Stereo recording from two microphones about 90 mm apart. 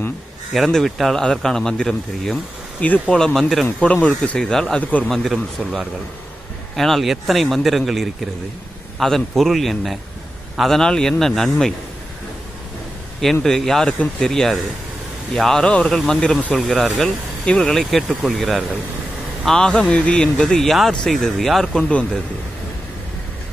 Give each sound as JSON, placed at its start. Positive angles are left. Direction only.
{"t": 0.5, "sound": "speech", "side_deg": 0}
{"t": 2.8, "sound": "speech", "side_deg": 15}
{"t": 3.2, "sound": "speech", "side_deg": 5}
{"t": 13.2, "sound": "speech", "side_deg": 5}